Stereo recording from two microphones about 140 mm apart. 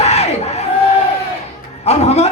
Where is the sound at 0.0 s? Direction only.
50° left (ahead or behind).